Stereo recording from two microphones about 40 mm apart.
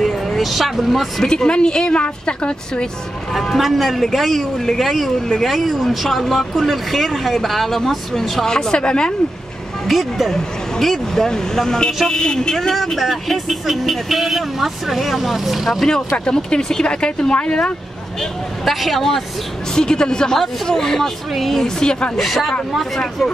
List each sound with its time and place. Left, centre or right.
0.0 s speech: centre
1.2 s speech: centre
3.5 s speech: centre
8.5 s speech: left
9.8 s speech: centre
12.8 s speech: centre
15.9 s speech: centre
18.7 s speech: centre
19.7 s speech: centre
21.6 s speech: centre
22.2 s speech: centre